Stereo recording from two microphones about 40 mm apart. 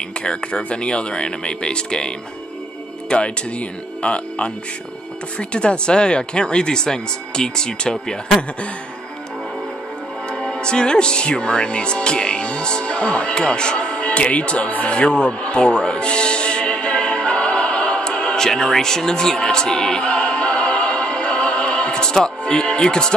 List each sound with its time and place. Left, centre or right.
0.2 s speech: left
10.3 s speech: centre
14.7 s music: left; by 23.1 s centre